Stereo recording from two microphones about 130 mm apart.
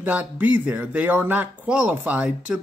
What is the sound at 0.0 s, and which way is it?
Speech, 10° right (ahead or behind).